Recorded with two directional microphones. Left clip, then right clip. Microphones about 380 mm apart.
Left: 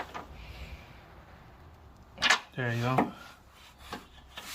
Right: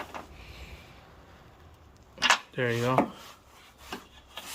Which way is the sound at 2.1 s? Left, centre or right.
Centre.